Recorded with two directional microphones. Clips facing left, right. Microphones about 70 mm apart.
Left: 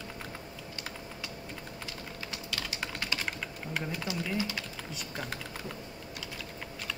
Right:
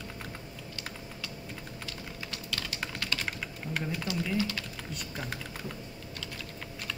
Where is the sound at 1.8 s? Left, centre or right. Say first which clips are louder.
Even; centre.